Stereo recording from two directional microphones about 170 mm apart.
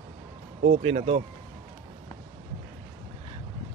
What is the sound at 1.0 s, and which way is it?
Speech, 40° right (ahead or behind).